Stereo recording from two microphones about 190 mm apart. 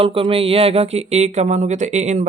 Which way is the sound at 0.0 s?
30° right (ahead or behind).